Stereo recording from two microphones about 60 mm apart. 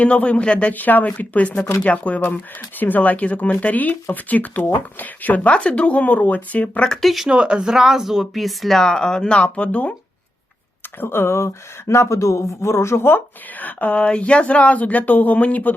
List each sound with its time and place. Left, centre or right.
0.0 s speech: left
4.6 s speech: left
5.0 s speech: left
5.5 s speech: centre
6.8 s speech: centre
7.3 s speech: centre; by 9.9 s left
11.0 s speech: left
13.6 s speech: left